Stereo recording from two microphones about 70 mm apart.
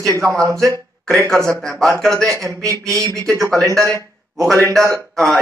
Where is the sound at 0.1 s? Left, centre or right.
Right.